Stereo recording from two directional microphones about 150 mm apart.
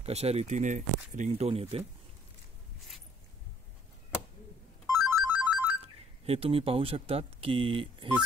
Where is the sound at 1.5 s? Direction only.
40° right (ahead or behind).